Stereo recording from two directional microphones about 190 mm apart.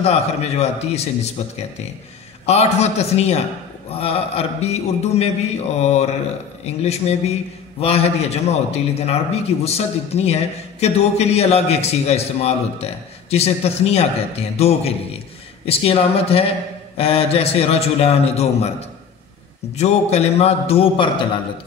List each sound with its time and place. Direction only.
0.0 s a man's voice: 35° left (ahead or behind)
2.4 s a man's voice: 35° left (ahead or behind)